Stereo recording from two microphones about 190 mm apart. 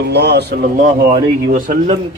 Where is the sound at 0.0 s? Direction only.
60° right (ahead or behind).